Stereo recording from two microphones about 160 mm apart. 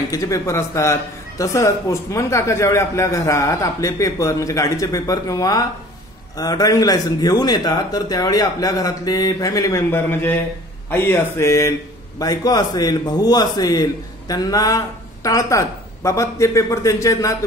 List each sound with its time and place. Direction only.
0.1 s a man's voice: 20° left (ahead or behind)